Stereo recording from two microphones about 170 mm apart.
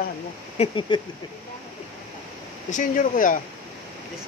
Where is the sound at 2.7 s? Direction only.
50° left (ahead or behind).